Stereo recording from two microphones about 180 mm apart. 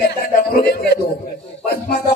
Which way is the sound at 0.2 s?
60° left (ahead or behind).